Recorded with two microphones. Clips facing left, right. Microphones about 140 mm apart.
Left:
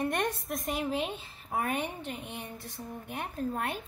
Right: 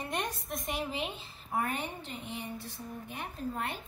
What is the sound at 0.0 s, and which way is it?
Speech, 50° left (ahead or behind).